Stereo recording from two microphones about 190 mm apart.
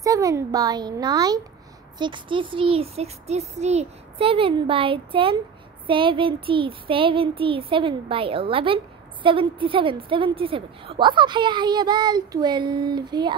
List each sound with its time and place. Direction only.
0.0 s child singing: 15° right (ahead or behind)